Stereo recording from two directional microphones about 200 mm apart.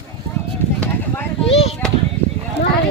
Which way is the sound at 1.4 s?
30° left (ahead or behind).